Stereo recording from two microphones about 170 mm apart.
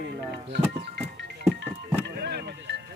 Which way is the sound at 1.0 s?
75° right (ahead or behind).